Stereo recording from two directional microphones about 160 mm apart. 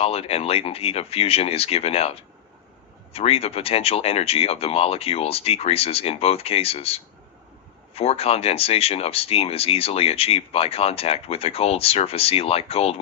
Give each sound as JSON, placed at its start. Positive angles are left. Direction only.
{"t": 0.0, "sound": "speech", "side_deg": 40}